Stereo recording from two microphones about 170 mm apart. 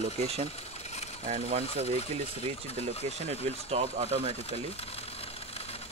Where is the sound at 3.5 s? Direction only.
35° right (ahead or behind).